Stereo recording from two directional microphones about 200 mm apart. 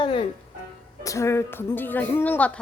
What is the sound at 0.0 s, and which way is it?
Speech, 25° left (ahead or behind).